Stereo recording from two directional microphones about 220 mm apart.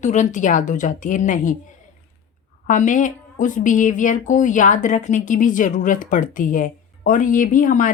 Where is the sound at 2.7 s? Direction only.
35° left (ahead or behind).